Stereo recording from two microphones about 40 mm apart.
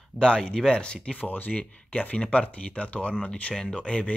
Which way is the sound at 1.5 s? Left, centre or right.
Left.